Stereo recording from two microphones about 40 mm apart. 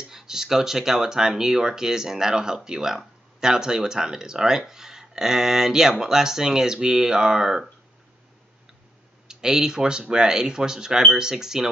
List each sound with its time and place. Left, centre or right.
0.0 s speech: centre
9.3 s speech: centre